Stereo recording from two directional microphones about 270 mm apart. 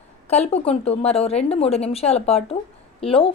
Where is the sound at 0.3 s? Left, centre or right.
Left.